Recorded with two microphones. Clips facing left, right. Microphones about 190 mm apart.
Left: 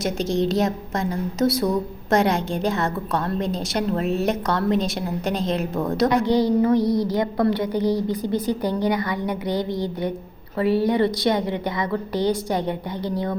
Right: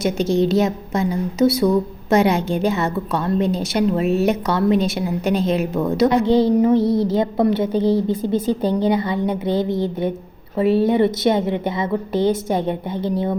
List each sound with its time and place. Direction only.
0.0 s a woman's voice: centre (ahead or behind)
6.1 s a woman's voice: 25° right (ahead or behind)